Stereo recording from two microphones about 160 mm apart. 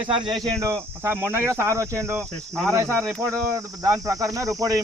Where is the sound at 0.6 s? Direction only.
15° right (ahead or behind).